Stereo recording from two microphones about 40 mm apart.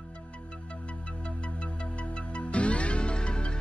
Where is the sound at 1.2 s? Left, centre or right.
Left.